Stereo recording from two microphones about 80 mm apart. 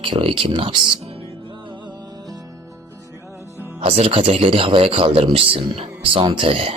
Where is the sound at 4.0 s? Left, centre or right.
Right.